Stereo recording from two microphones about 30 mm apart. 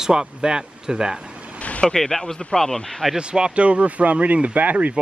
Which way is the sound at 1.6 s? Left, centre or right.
Left.